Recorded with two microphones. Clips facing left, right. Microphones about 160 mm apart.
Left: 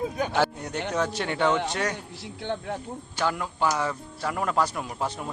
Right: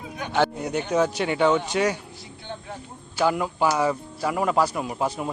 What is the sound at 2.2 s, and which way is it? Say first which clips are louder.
Speech: left 9 dB; 75° left (ahead or behind).